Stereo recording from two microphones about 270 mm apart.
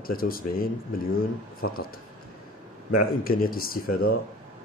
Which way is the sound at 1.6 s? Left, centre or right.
Left.